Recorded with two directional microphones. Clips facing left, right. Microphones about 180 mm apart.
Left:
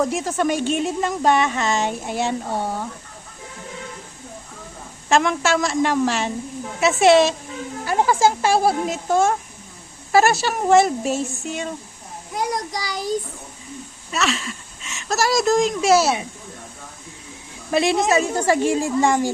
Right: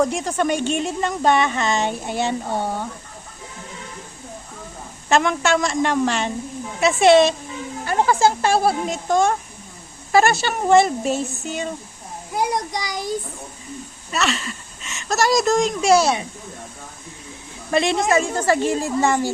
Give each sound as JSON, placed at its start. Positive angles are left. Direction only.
{"t": 0.0, "sound": "speech", "side_deg": 5}
{"t": 5.0, "sound": "a woman's voice", "side_deg": 0}
{"t": 12.3, "sound": "a child's voice", "side_deg": -25}
{"t": 14.1, "sound": "speech", "side_deg": 0}
{"t": 17.7, "sound": "a woman's voice", "side_deg": 5}